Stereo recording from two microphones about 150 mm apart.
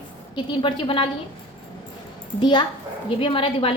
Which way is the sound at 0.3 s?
35° left (ahead or behind).